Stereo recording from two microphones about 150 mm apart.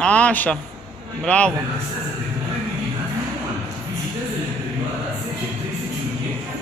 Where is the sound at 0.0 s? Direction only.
10° left (ahead or behind).